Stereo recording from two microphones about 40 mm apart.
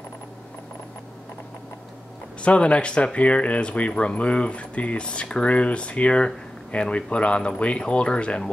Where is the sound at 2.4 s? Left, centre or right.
Left.